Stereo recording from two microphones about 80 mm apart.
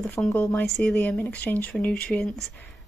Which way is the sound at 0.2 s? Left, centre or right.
Centre.